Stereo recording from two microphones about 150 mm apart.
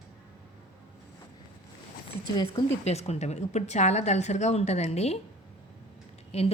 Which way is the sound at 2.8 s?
45° left (ahead or behind).